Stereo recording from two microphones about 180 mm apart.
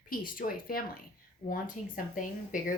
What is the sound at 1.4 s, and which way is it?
Speech, 35° left (ahead or behind).